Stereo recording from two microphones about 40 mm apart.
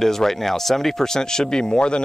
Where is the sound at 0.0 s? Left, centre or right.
Centre.